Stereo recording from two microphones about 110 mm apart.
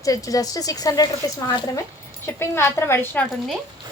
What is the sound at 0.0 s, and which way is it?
A woman's voice, 30° left (ahead or behind).